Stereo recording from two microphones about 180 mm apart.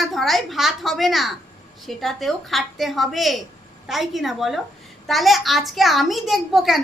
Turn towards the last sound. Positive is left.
turn(degrees=0)  # may be behind; listen again after turning